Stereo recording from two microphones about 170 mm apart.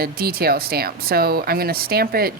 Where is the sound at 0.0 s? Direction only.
65° right (ahead or behind).